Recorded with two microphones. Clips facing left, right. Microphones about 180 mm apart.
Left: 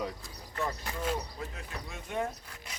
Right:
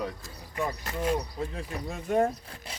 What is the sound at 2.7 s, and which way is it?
Sawing, 30° right (ahead or behind).